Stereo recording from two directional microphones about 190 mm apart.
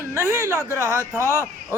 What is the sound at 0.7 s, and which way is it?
Speech, 15° left (ahead or behind).